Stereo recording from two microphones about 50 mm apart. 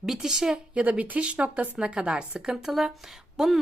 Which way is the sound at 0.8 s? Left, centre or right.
Right.